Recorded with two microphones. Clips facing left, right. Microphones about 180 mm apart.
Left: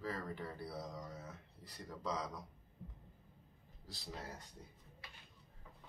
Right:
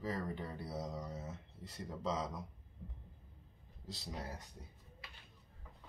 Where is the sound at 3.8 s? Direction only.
20° right (ahead or behind).